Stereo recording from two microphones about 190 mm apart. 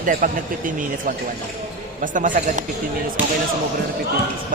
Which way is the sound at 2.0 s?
45° right (ahead or behind).